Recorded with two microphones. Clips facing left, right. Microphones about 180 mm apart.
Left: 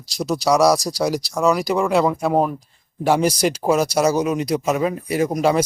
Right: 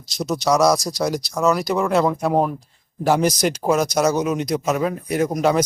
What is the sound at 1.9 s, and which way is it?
Speech, 5° left (ahead or behind).